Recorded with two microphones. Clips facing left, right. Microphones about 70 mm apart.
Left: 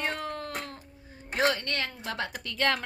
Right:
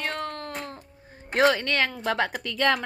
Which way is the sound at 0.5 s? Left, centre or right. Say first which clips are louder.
Right 2 dB; right.